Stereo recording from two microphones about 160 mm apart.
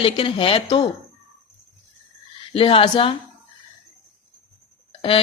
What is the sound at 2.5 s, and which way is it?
Speech, 35° left (ahead or behind).